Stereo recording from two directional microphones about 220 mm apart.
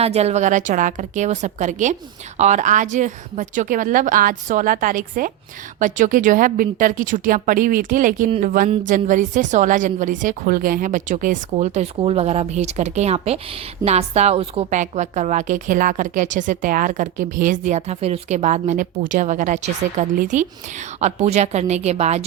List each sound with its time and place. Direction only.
0.0 s a woman's voice: 30° right (ahead or behind)